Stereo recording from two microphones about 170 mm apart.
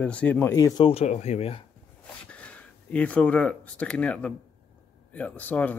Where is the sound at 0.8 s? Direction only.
40° left (ahead or behind).